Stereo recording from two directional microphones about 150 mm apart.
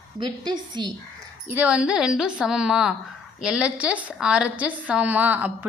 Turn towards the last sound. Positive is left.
turn(degrees=-10)  # may be behind; listen again after turning